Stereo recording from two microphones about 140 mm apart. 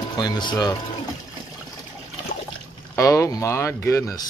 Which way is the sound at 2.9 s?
20° left (ahead or behind).